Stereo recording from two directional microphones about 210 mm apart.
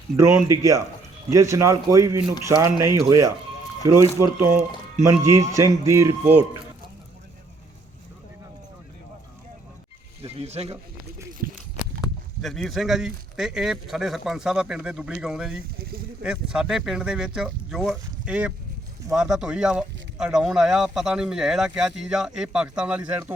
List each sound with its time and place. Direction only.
0.2 s a man's voice: 15° right (ahead or behind)
10.2 s speech: 30° right (ahead or behind)
12.4 s speech: centre (ahead or behind)